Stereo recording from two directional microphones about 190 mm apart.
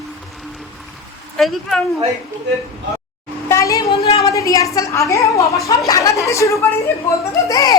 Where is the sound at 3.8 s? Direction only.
30° left (ahead or behind).